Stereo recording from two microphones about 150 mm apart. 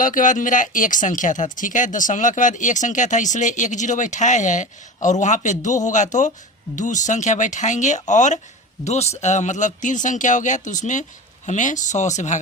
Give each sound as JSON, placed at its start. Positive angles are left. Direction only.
{"t": 0.0, "sound": "speech", "side_deg": 60}